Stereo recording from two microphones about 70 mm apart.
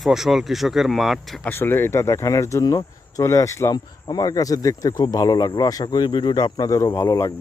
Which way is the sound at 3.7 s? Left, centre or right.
Left.